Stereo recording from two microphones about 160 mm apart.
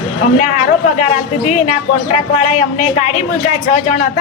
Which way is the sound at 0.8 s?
45° left (ahead or behind).